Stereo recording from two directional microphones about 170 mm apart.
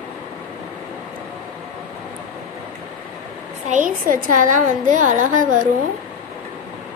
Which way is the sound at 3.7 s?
50° right (ahead or behind).